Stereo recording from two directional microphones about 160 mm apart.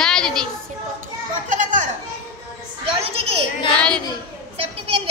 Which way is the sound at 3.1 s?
40° right (ahead or behind).